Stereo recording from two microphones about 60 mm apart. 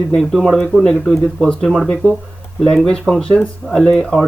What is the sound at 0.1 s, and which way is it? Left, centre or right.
Speech, centre.